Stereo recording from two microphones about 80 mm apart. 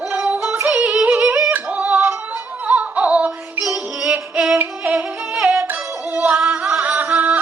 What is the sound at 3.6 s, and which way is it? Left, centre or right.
Music, centre.